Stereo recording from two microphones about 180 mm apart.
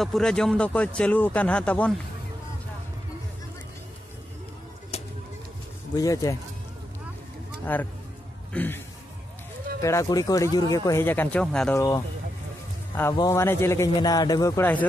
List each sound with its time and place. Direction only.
0.0 s a man's voice: centre (ahead or behind)
4.9 s a sound: 35° left (ahead or behind)
5.9 s speech: 20° left (ahead or behind)
7.7 s speech: 10° left (ahead or behind)
11.7 s speech: 15° left (ahead or behind)
13.1 s speech: 20° left (ahead or behind)